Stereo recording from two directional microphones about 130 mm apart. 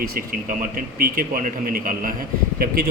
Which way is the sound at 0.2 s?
90° right.